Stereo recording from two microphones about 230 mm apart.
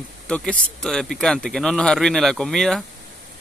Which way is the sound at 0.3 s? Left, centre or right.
Centre.